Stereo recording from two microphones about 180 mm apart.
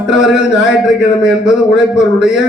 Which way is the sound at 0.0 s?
5° right (ahead or behind).